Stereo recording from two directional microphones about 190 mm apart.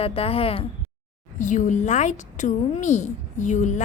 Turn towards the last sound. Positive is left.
turn(degrees=40)  # may be behind; listen again after turning